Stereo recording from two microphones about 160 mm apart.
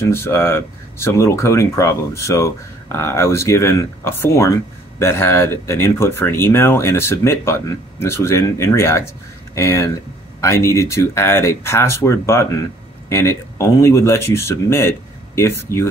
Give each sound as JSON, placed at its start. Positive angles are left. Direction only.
{"t": 0.0, "sound": "speech", "side_deg": 15}